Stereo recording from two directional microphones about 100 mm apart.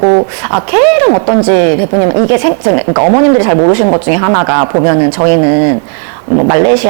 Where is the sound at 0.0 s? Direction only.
25° right (ahead or behind).